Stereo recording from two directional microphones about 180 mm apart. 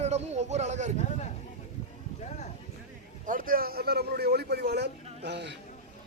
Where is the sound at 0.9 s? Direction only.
40° left (ahead or behind).